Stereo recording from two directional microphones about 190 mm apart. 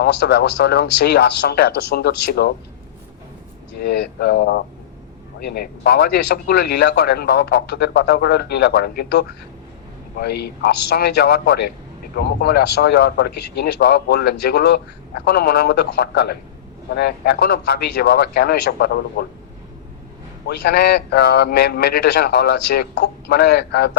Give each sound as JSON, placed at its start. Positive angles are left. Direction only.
{"t": 0.0, "sound": "speech", "side_deg": 55}
{"t": 3.8, "sound": "speech", "side_deg": 60}
{"t": 20.5, "sound": "speech", "side_deg": 60}